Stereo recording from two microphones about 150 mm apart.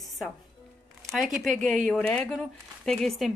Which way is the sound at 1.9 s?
10° left (ahead or behind).